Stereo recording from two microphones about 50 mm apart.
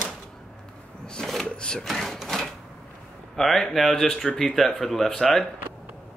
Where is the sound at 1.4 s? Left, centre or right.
Centre.